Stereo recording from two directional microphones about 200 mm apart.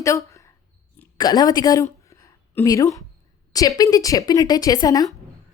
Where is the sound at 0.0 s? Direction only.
15° left (ahead or behind).